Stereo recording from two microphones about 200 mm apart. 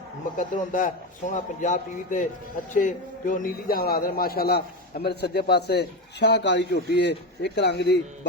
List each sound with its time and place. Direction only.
0.3 s a man's voice: 40° left (ahead or behind); by 8.3 s 55° left (ahead or behind)